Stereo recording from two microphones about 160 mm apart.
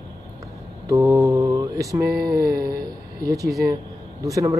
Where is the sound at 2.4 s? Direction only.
75° right (ahead or behind).